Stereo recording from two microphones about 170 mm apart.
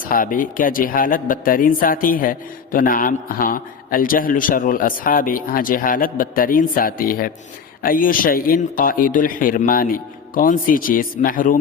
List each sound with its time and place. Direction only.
0.0 s a man's voice: 55° left (ahead or behind)